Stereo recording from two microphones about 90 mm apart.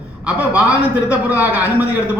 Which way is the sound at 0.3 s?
15° right (ahead or behind).